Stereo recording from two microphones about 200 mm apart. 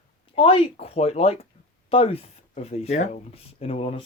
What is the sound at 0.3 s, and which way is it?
Speech, 25° left (ahead or behind).